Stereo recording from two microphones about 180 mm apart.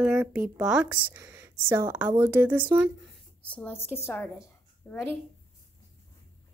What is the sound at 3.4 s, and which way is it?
A woman's voice, 10° left (ahead or behind).